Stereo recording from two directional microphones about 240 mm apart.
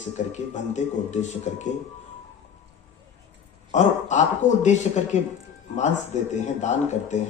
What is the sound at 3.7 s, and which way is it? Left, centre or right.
A man's voice, left.